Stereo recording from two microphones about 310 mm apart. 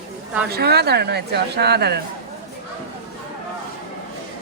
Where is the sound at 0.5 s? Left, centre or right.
Right.